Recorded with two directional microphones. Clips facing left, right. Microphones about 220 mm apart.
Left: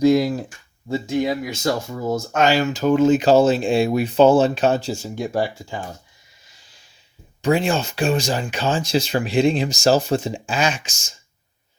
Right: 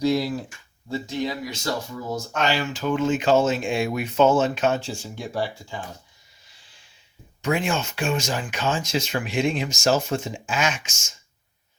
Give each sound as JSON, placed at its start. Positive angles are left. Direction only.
{"t": 0.0, "sound": "a sound", "side_deg": 45}
{"t": 0.9, "sound": "speech", "side_deg": 45}
{"t": 7.4, "sound": "speech", "side_deg": 35}